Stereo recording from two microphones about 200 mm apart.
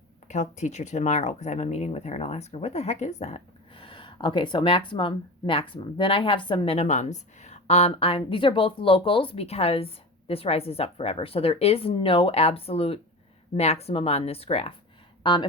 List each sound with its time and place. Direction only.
0.3 s speech: 35° left (ahead or behind)